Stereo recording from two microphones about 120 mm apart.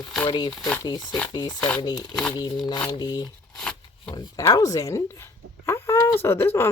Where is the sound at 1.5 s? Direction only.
10° left (ahead or behind).